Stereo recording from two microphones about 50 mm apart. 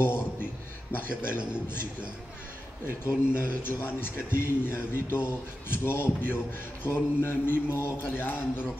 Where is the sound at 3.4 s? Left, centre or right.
Left.